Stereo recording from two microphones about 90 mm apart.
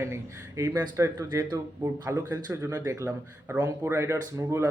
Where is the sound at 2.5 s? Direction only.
30° right (ahead or behind).